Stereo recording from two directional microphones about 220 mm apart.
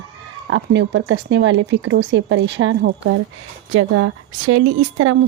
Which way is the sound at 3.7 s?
80° right.